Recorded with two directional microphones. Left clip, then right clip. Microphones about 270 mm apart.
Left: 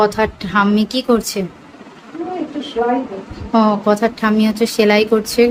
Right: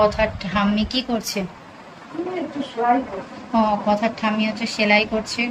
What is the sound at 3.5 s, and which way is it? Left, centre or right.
A woman's voice, centre.